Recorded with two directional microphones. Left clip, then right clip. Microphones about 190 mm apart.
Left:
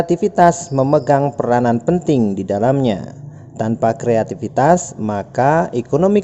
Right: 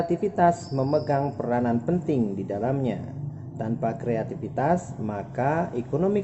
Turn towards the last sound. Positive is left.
turn(degrees=50)  # may be behind; listen again after turning